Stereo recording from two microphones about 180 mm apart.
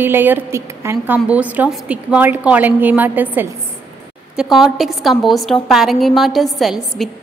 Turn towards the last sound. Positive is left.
turn(degrees=0)  # may be behind; listen again after turning